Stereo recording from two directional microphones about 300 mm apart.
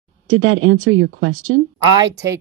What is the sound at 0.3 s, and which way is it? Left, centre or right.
Speech, right.